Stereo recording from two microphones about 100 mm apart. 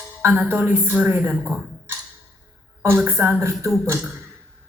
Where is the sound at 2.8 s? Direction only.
20° right (ahead or behind).